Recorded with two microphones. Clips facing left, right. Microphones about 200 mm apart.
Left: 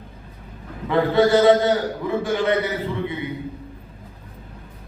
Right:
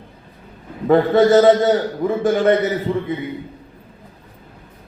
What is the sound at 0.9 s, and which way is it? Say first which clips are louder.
A man's voice: right 4 dB; 45° right (ahead or behind).